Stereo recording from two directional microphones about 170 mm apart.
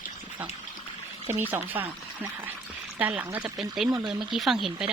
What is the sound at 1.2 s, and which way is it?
Speech, 10° right (ahead or behind).